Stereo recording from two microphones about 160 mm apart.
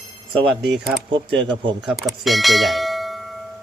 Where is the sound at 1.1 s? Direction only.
30° right (ahead or behind).